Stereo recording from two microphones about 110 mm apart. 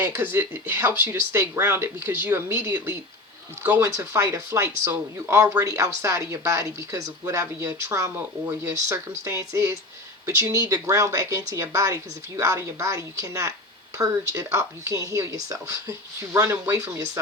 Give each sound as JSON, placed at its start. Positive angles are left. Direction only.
{"t": 0.0, "sound": "speech", "side_deg": -15}